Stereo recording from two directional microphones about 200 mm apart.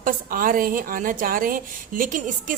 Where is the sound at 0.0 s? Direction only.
45° right (ahead or behind).